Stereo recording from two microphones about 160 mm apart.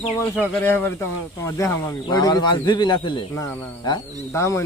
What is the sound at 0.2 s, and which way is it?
Speech, 15° left (ahead or behind).